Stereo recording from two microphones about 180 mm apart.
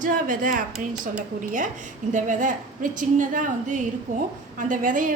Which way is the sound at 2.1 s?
45° right (ahead or behind).